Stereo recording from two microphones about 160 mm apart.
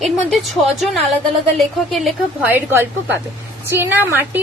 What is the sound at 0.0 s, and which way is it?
Speech, centre (ahead or behind).